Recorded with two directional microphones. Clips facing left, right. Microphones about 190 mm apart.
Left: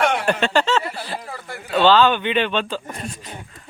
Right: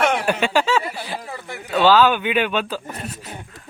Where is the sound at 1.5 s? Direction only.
Centre (ahead or behind).